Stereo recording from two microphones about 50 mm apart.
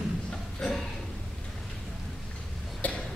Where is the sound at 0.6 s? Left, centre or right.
Centre.